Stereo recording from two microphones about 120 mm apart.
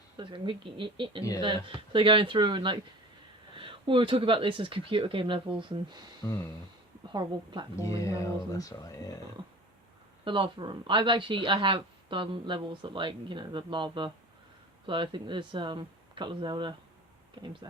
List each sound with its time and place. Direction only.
0.2 s speech: 45° right (ahead or behind)
7.1 s speech: 40° right (ahead or behind)
7.8 s speech: 25° left (ahead or behind)
10.2 s speech: 45° right (ahead or behind)